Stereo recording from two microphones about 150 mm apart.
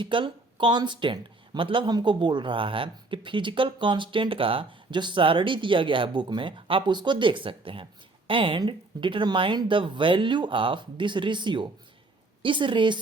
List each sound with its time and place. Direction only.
0.0 s speech: 35° right (ahead or behind)